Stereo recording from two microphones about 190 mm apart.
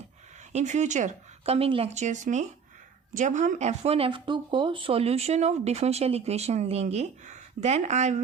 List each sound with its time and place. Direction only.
0.5 s speech: 40° right (ahead or behind)